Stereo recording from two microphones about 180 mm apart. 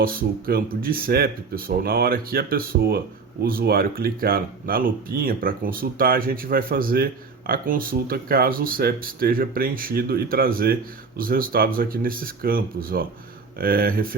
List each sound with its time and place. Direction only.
0.0 s speech: 55° right (ahead or behind)